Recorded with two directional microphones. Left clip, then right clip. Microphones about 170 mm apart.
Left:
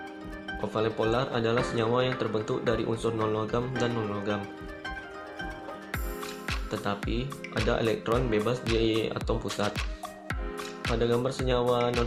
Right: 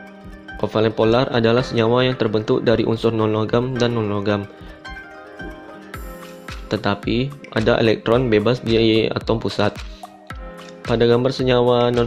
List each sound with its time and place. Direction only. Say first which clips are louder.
0.7 s speech: right 11 dB; 50° right (ahead or behind)
6.7 s speech: right 13 dB; 50° right (ahead or behind)
10.9 s speech: right 12 dB; 50° right (ahead or behind)